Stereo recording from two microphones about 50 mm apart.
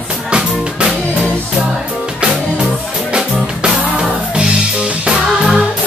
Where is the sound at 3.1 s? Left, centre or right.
Centre.